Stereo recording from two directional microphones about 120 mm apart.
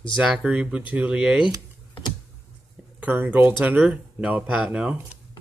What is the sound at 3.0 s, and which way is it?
Speech, 15° right (ahead or behind).